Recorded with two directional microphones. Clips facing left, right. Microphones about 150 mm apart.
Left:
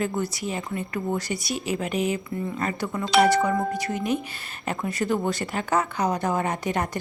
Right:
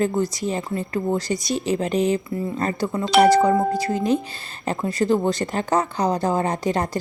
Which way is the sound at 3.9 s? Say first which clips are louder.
Right 5 dB; 30° right (ahead or behind).